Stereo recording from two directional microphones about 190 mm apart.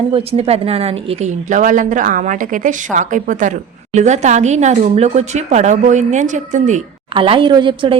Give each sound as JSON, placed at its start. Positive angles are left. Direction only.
{"t": 0.1, "sound": "a woman's voice", "side_deg": -30}
{"t": 7.1, "sound": "a woman's voice", "side_deg": -25}